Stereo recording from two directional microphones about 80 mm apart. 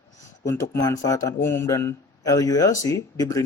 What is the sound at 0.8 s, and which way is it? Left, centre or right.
Speech, left.